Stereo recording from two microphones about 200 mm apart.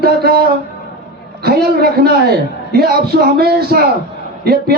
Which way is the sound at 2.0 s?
50° right (ahead or behind).